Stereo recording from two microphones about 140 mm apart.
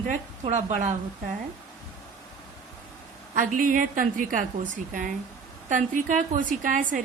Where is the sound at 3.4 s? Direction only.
70° right (ahead or behind).